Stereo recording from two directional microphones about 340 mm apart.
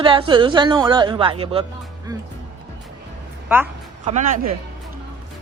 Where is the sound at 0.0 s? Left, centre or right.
Centre.